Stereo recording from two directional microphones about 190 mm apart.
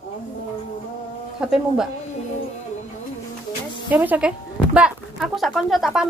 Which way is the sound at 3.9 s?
10° right (ahead or behind).